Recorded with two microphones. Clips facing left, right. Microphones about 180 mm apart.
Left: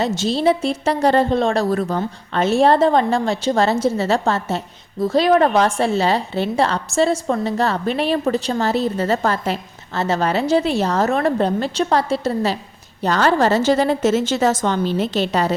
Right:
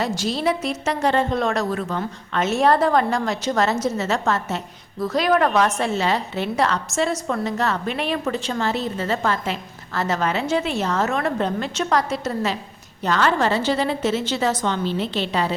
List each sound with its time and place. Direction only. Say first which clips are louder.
0.0 s a woman's voice: left 5 dB; 25° left (ahead or behind)
9.9 s a woman's voice: left 3 dB; 30° left (ahead or behind); by 15.5 s 45° left (ahead or behind)